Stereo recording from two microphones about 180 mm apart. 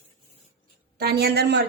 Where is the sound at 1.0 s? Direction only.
60° right (ahead or behind).